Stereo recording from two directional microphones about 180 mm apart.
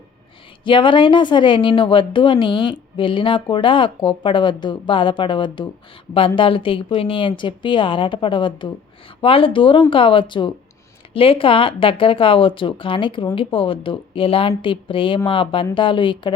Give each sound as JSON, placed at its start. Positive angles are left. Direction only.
{"t": 0.6, "sound": "a woman's voice", "side_deg": 30}